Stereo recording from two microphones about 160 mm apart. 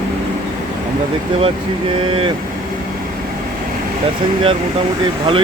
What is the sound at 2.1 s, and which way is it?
Speech, 35° right (ahead or behind).